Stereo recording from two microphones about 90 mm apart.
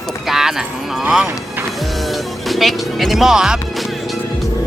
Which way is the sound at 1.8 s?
Centre (ahead or behind).